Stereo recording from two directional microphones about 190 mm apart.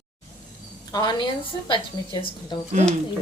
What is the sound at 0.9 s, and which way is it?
Speech, 25° left (ahead or behind).